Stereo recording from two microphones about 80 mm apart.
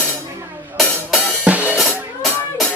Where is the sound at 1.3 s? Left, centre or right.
Centre.